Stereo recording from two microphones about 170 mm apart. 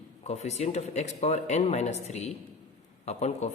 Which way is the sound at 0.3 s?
40° left (ahead or behind).